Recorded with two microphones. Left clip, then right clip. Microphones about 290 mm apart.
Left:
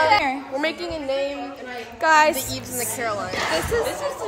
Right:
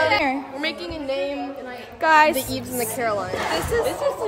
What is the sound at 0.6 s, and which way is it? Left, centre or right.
Speech, centre.